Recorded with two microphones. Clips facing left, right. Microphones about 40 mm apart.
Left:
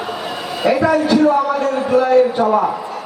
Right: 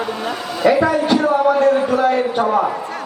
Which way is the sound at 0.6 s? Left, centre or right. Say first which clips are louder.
Even; right.